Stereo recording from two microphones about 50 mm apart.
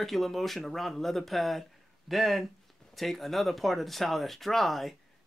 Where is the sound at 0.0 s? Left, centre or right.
Centre.